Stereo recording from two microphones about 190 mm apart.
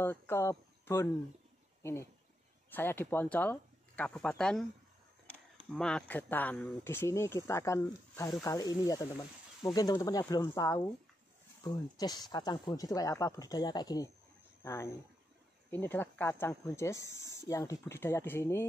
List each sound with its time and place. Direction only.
0.0 s speech: 10° left (ahead or behind)
5.7 s speech: 5° left (ahead or behind)
12.0 s speech: 20° left (ahead or behind)